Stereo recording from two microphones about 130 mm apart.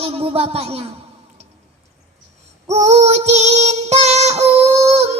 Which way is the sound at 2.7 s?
55° right (ahead or behind).